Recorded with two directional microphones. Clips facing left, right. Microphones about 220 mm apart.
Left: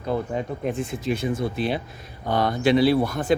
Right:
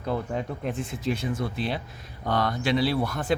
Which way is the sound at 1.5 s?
55° left (ahead or behind).